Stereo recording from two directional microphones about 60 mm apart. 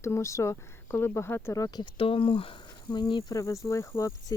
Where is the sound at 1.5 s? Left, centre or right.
Left.